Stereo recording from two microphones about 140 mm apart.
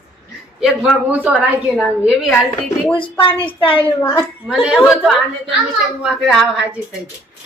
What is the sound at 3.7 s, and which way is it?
Speech, 15° left (ahead or behind).